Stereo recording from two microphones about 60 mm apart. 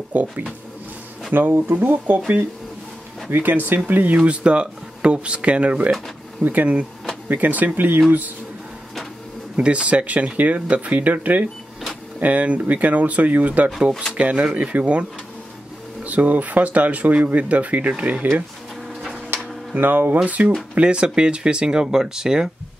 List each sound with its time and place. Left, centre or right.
0.1 s speech: right
1.5 s speech: right
3.3 s speech: right
9.6 s speech: centre
19.8 s speech: right; by 22.5 s centre